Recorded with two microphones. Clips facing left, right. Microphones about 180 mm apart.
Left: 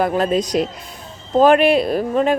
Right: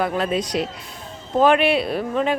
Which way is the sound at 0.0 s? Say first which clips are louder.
Left 4 dB; 40° left (ahead or behind).